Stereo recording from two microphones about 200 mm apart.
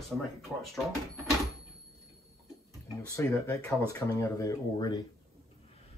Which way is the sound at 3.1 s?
15° left (ahead or behind).